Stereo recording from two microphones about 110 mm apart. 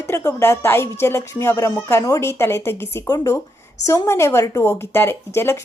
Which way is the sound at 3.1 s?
35° left (ahead or behind).